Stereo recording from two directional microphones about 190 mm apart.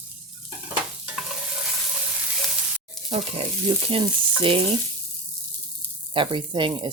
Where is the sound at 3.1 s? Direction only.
30° right (ahead or behind).